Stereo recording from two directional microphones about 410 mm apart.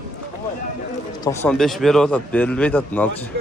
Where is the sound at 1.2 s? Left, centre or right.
Centre.